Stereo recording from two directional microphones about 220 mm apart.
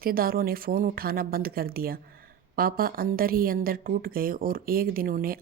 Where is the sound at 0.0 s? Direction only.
40° right (ahead or behind).